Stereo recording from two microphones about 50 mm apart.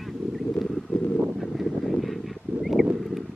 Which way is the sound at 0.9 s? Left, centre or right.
Left.